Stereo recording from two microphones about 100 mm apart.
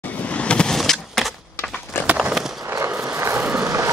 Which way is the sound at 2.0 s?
25° left (ahead or behind).